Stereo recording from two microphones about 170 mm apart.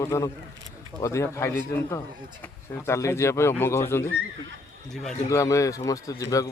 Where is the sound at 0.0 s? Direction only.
15° left (ahead or behind).